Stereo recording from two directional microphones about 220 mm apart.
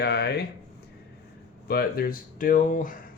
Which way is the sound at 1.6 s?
45° left (ahead or behind).